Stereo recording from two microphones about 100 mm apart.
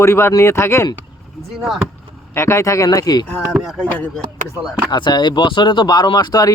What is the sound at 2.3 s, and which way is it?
Speech, 30° left (ahead or behind).